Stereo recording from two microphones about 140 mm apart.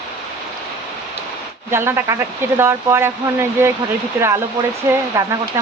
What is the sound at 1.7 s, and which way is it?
Speech, 15° right (ahead or behind).